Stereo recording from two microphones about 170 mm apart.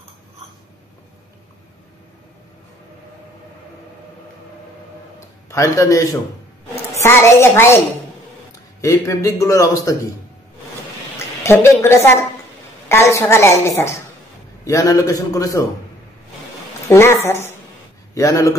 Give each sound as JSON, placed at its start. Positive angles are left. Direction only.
{"t": 5.5, "sound": "a man's voice", "side_deg": 20}
{"t": 8.8, "sound": "a man's voice", "side_deg": 20}
{"t": 11.1, "sound": "a woman's voice", "side_deg": 15}
{"t": 16.8, "sound": "a woman's voice", "side_deg": 15}